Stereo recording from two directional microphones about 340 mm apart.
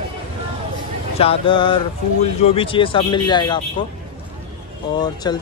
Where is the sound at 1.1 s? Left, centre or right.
Centre.